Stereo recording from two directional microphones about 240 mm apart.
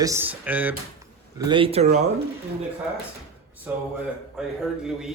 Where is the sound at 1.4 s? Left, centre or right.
Centre.